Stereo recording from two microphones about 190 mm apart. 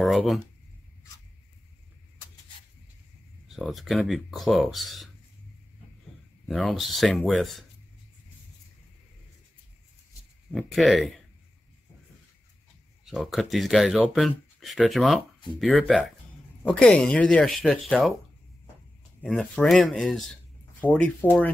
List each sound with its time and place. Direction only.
0.0 s speech: centre (ahead or behind)
3.4 s speech: centre (ahead or behind)
6.4 s speech: centre (ahead or behind)
10.5 s speech: centre (ahead or behind)
13.0 s speech: centre (ahead or behind)
19.2 s speech: 5° left (ahead or behind)